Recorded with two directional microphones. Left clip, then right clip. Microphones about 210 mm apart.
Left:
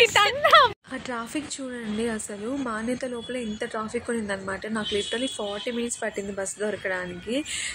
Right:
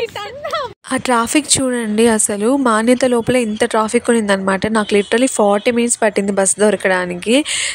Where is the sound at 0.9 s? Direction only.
55° right (ahead or behind).